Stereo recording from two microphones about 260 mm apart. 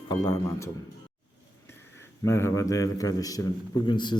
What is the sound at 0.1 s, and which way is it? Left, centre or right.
Speech, centre.